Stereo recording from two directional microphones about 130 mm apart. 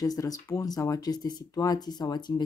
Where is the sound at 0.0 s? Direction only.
30° left (ahead or behind).